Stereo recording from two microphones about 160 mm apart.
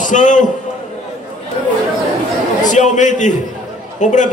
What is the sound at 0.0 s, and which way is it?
Speech, 50° left (ahead or behind).